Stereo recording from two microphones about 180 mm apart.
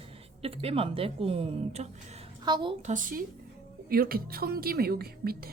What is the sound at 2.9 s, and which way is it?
A woman's voice, 50° right (ahead or behind).